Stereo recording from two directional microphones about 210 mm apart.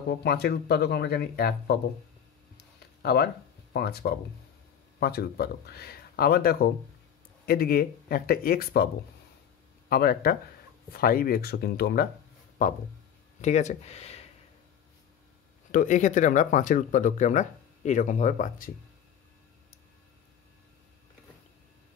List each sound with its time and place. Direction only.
0.1 s speech: 50° left (ahead or behind)
2.5 s a sound: 50° left (ahead or behind)
3.7 s speech: 50° left (ahead or behind)
9.8 s speech: 45° left (ahead or behind); by 14.2 s 30° left (ahead or behind)
15.7 s speech: 40° left (ahead or behind)